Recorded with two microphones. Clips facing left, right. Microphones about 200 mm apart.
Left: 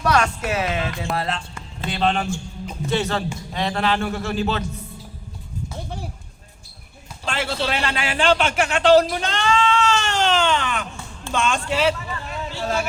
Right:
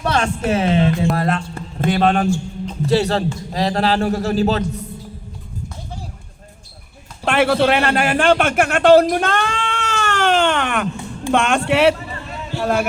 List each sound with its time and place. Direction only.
0.0 s a woman's voice: 30° right (ahead or behind)
1.1 s a man's voice: 50° right (ahead or behind)
2.8 s a man's voice: 35° right (ahead or behind)
7.3 s a man's voice: 60° right (ahead or behind)
12.5 s a sound: 60° right (ahead or behind)